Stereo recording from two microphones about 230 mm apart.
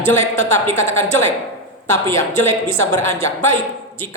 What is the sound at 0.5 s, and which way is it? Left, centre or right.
Speech, centre.